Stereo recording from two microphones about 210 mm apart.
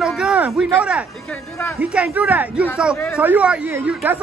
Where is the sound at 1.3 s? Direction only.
10° left (ahead or behind).